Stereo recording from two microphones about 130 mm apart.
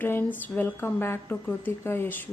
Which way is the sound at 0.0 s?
15° left (ahead or behind).